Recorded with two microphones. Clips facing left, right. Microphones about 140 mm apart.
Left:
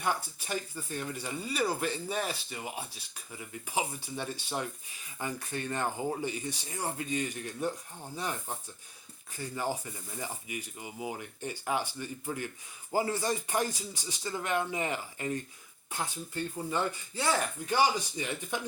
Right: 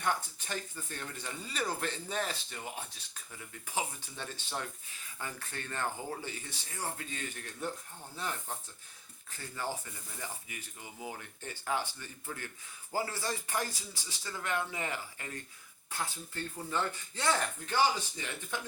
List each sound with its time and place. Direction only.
0.0 s speech: 10° left (ahead or behind)